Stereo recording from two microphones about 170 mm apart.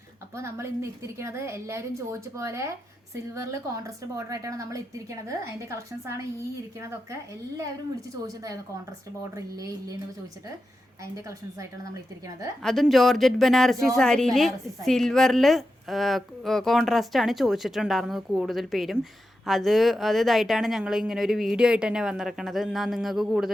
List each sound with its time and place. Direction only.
0.3 s a woman's voice: 15° right (ahead or behind)
11.0 s a woman's voice: 20° right (ahead or behind)
12.6 s a woman's voice: centre (ahead or behind)